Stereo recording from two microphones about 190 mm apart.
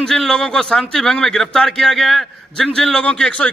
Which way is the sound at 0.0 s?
5° left (ahead or behind).